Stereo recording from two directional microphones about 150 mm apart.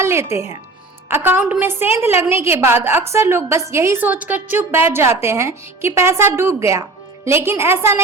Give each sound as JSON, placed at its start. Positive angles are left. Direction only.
{"t": 0.0, "sound": "a woman's voice", "side_deg": -20}